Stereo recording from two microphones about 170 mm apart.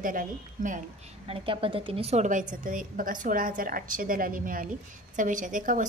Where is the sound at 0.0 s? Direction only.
50° right (ahead or behind).